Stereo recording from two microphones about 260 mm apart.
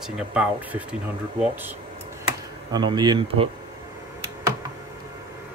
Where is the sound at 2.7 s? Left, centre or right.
Centre.